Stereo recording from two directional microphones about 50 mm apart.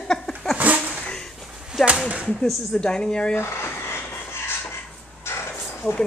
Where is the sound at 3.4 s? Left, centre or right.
Left.